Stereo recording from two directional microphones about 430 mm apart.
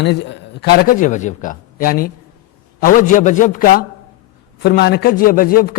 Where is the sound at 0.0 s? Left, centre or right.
Left.